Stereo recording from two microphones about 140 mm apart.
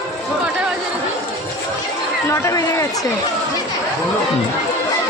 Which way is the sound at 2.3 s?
20° left (ahead or behind).